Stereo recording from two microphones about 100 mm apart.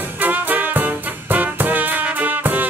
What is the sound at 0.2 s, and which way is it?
Music, 20° right (ahead or behind).